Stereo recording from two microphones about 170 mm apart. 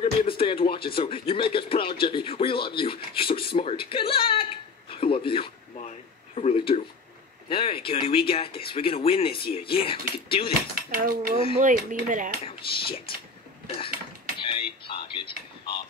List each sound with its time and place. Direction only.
0.0 s speech: 35° left (ahead or behind)
10.7 s dishes: 55° right (ahead or behind)
11.6 s speech: 50° right (ahead or behind)
12.4 s speech: 30° left (ahead or behind)
14.4 s music: 30° left (ahead or behind)